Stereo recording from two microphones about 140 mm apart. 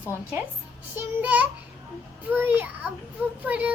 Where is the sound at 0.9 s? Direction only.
10° right (ahead or behind).